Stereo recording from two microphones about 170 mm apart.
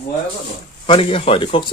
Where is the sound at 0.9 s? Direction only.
35° left (ahead or behind).